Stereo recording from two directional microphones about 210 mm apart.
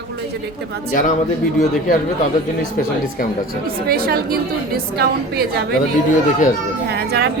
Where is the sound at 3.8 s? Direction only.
45° right (ahead or behind).